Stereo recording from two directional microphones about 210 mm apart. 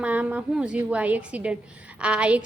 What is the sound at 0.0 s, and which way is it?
A woman's voice, 5° right (ahead or behind).